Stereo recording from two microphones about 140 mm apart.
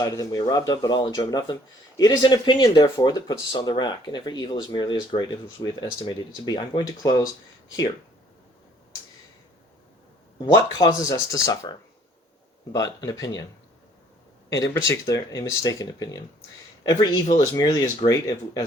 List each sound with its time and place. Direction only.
0.0 s speech: 25° left (ahead or behind)
10.5 s speech: 25° left (ahead or behind)
12.7 s speech: 25° left (ahead or behind)
14.5 s speech: 20° left (ahead or behind)